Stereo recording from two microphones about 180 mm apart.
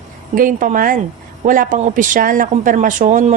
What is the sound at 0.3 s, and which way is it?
A woman's voice, 50° right (ahead or behind).